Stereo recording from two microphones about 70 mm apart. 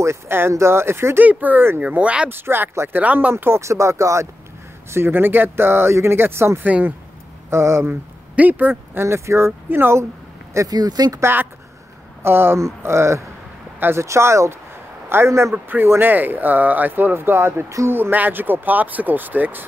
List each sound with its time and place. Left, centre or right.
0.0 s speech: right
1.2 s speech: right
2.3 s speech: right
3.0 s speech: right
4.9 s speech: right
6.6 s speech: right
7.4 s speech: right
7.9 s speech: right
9.0 s speech: right
10.7 s speech: right
11.1 s speech: right
14.0 s speech: right
15.5 s speech: right
17.9 s speech: right